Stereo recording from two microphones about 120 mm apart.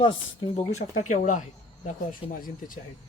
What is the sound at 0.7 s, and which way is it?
Speech, 80° left.